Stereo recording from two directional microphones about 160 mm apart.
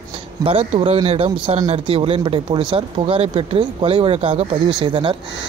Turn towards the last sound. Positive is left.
turn(degrees=-30)  # may be behind; listen again after turning